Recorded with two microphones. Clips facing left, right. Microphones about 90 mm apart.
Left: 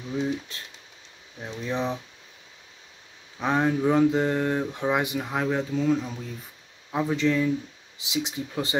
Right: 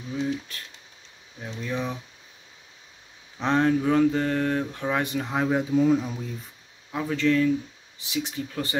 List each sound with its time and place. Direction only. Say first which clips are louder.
1.4 s speech: left 2 dB; 25° left (ahead or behind)
3.3 s speech: right 2 dB; 10° left (ahead or behind)
5.3 s speech: right 4 dB; 5° right (ahead or behind)
6.9 s speech: even; 20° left (ahead or behind)